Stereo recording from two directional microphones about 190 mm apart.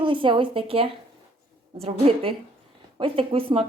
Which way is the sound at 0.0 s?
25° right (ahead or behind).